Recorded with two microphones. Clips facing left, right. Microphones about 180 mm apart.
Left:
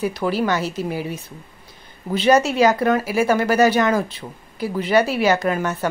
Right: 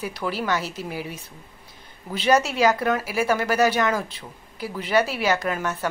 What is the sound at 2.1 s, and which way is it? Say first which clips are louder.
Speech: left 4 dB; 5° right (ahead or behind).